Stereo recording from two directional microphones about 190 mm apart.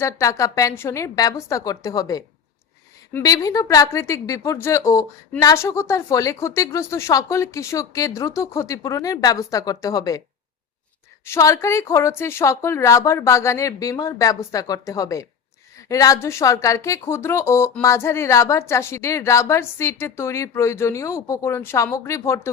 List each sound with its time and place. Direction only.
0.0 s speech: 15° left (ahead or behind)
11.3 s speech: 15° left (ahead or behind)